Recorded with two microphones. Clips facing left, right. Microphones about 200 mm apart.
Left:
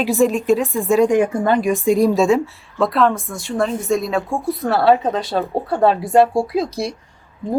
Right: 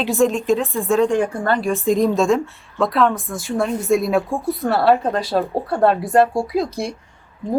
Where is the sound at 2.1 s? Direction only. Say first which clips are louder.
Left 2 dB; centre (ahead or behind).